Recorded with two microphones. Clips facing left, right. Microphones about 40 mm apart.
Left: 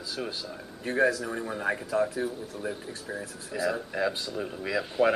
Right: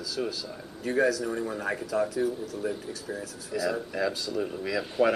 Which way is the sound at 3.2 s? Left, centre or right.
Left.